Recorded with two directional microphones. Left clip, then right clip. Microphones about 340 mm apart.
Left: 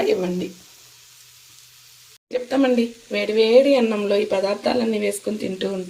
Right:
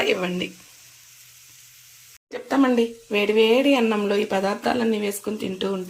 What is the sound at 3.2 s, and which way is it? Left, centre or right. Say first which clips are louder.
Speech: left 3 dB; centre.